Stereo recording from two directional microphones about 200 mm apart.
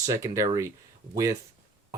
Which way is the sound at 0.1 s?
15° right (ahead or behind).